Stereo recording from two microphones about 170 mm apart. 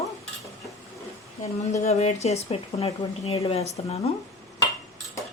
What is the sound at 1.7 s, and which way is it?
Speech, 40° left (ahead or behind).